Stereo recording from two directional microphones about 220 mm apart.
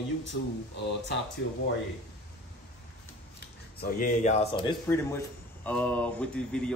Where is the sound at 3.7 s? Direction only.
40° left (ahead or behind).